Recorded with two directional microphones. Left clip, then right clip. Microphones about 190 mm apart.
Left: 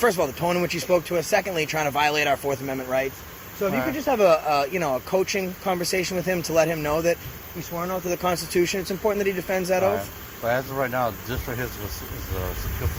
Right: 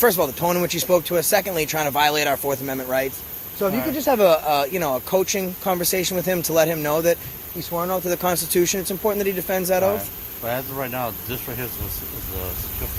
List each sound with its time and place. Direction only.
0.0 s speech: 25° right (ahead or behind)
10.4 s speech: 5° left (ahead or behind)